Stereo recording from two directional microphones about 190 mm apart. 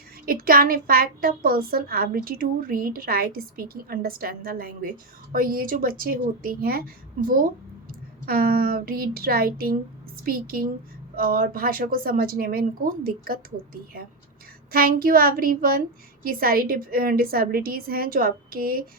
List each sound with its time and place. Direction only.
0.3 s a woman's voice: 50° right (ahead or behind)
14.7 s a woman's voice: 50° right (ahead or behind)